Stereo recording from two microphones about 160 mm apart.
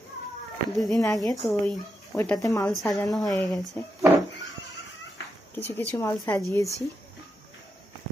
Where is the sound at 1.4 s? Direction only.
Centre (ahead or behind).